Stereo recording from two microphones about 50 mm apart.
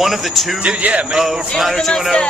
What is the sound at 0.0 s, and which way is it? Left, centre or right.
Speech, centre.